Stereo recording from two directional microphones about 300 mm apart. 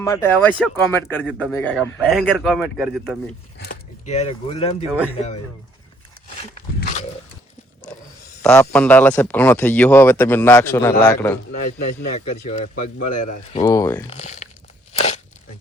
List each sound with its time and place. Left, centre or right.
0.0 s speech: centre
3.6 s a man's voice: left
8.4 s speech: centre
11.5 s a man's voice: left
13.6 s speech: centre
14.2 s a man's voice: left
14.9 s a sound: left